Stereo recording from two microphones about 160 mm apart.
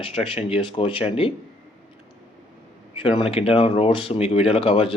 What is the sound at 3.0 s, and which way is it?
Speech, 35° left (ahead or behind).